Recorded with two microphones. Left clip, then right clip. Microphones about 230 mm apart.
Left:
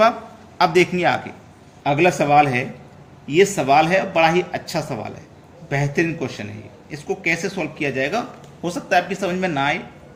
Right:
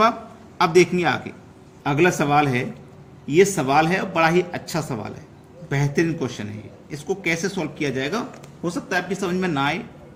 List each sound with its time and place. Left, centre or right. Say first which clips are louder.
0.6 s a man's voice: left 1 dB; centre